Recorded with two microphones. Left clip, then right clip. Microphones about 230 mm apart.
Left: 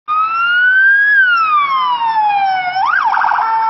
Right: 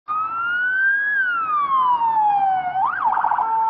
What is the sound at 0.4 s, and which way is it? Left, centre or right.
Emergency vehicle, centre.